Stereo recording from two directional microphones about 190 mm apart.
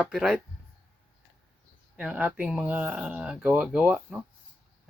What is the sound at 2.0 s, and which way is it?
Speech, 5° right (ahead or behind).